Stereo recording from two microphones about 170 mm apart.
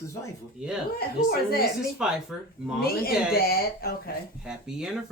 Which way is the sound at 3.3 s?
65° left (ahead or behind).